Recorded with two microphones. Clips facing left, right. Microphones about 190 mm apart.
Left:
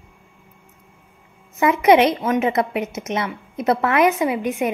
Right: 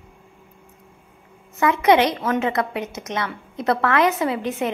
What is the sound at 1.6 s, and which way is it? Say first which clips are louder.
A woman's voice: left 2 dB; 20° left (ahead or behind).